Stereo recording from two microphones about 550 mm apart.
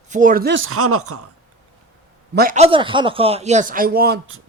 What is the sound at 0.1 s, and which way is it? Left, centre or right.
Speech, centre.